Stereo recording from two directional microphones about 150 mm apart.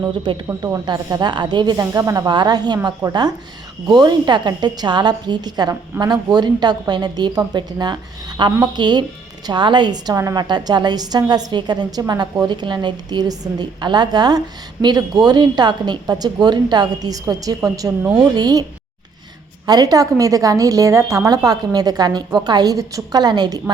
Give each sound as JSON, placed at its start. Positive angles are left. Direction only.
{"t": 0.1, "sound": "a woman's voice", "side_deg": -30}
{"t": 19.6, "sound": "a woman's voice", "side_deg": -25}